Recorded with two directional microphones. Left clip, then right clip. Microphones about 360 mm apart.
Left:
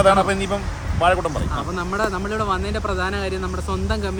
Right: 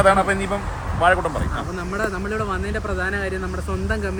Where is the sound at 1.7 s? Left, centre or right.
Centre.